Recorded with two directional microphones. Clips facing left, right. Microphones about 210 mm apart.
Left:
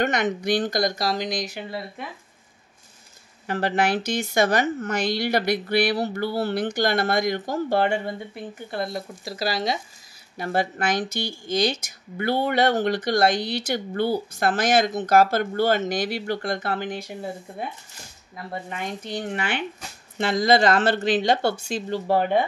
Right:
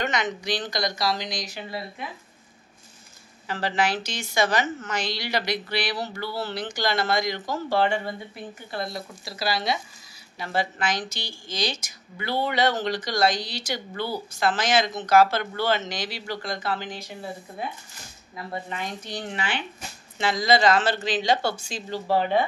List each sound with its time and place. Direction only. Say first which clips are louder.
0.0 s speech: left 4 dB; 55° left (ahead or behind)
3.4 s speech: left 3 dB; 55° left (ahead or behind)
18.3 s speech: even; 50° left (ahead or behind)